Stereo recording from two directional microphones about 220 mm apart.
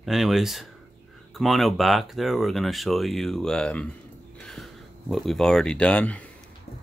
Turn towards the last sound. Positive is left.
turn(degrees=5)  # may be behind; listen again after turning